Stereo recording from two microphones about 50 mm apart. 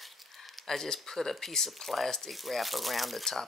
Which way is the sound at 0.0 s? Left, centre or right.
Centre.